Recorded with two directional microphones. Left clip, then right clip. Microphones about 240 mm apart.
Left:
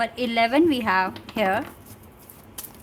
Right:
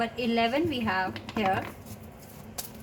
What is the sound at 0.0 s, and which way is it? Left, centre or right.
A woman's voice, left.